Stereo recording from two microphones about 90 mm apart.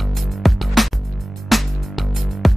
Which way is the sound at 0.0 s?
Centre (ahead or behind).